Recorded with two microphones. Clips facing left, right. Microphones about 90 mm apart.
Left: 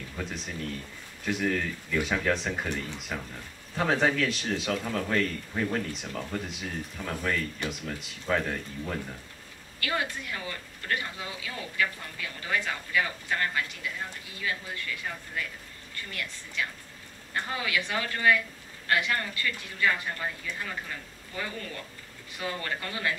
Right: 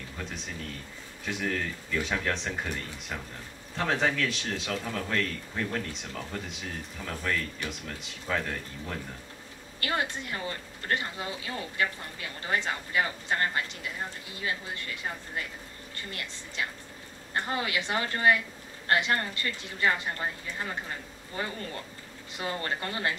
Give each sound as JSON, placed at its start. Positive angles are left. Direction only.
{"t": 0.2, "sound": "speech", "side_deg": 0}
{"t": 9.8, "sound": "speech", "side_deg": -25}
{"t": 16.1, "sound": "speech", "side_deg": -25}
{"t": 22.4, "sound": "speech", "side_deg": -30}